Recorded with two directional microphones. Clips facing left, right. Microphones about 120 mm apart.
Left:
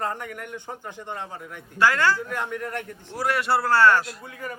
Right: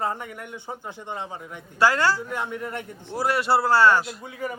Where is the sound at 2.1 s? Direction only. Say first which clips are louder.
Even; 10° right (ahead or behind).